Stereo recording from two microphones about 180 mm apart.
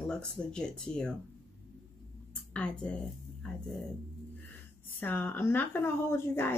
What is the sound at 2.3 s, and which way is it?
Speech, 5° left (ahead or behind).